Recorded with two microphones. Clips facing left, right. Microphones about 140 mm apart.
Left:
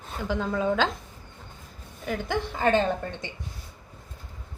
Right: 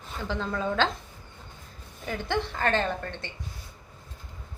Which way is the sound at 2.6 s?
15° left (ahead or behind).